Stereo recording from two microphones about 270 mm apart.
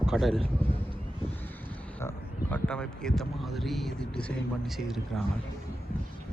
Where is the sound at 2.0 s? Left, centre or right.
Centre.